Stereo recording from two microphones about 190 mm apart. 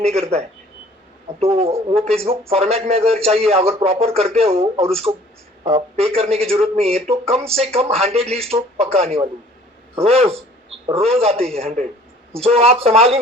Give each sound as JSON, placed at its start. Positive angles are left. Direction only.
{"t": 0.0, "sound": "speech", "side_deg": -30}